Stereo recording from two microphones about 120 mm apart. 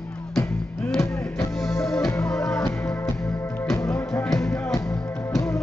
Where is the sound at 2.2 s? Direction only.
5° left (ahead or behind).